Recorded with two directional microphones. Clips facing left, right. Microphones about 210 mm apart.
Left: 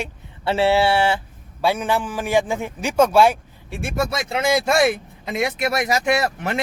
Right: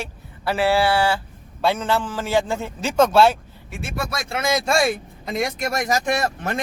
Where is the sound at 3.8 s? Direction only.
45° left (ahead or behind).